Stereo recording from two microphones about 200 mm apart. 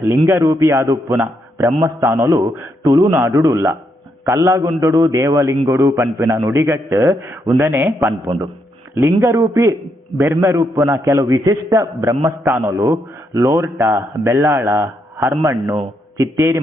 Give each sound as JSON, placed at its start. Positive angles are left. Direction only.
{"t": 0.3, "sound": "a man's voice", "side_deg": -15}